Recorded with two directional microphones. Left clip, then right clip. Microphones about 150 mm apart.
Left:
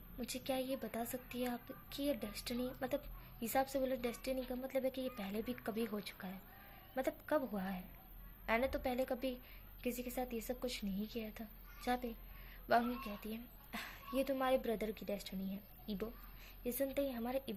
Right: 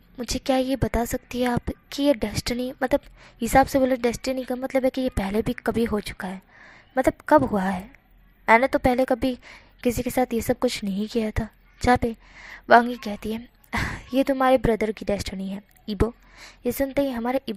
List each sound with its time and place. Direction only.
0.3 s a woman's voice: 45° right (ahead or behind)